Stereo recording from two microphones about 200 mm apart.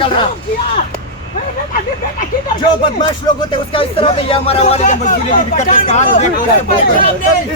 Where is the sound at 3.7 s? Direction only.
30° left (ahead or behind).